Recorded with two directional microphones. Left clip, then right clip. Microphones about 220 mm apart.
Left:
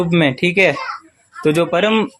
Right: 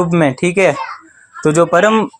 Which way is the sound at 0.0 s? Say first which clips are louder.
Right 2 dB; 5° right (ahead or behind).